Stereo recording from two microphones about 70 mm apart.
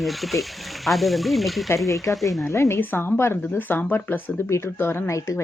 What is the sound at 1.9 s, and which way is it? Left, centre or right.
Speech, left.